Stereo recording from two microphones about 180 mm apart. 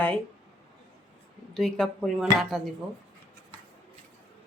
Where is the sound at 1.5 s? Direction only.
Centre (ahead or behind).